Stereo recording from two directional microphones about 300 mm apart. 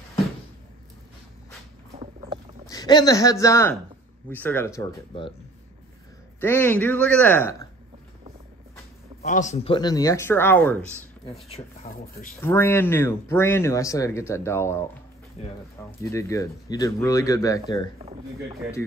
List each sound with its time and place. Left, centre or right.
2.7 s speech: centre
6.4 s speech: centre
9.2 s speech: left; by 10.8 s centre
11.4 s speech: centre
12.4 s speech: centre
16.0 s speech: centre